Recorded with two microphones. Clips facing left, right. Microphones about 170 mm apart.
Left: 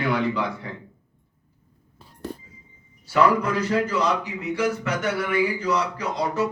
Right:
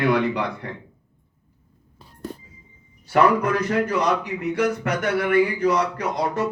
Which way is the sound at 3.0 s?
65° right (ahead or behind).